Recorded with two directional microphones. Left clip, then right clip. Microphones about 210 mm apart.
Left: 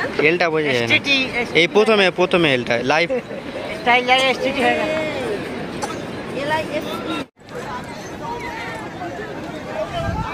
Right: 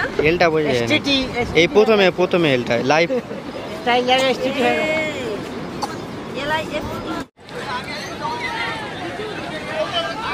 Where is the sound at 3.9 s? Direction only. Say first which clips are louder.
Left 1 dB; 55° right (ahead or behind).